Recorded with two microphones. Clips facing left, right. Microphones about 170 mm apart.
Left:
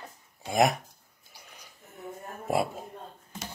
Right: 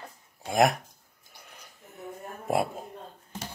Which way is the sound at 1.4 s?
55° right (ahead or behind).